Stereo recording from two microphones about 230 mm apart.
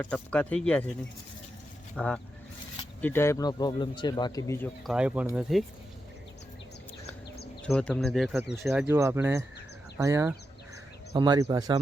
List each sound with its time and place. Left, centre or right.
0.0 s speech: centre
2.0 s speech: centre
4.9 s speech: centre
7.6 s speech: centre